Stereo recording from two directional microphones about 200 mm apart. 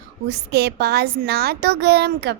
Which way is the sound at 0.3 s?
55° right (ahead or behind).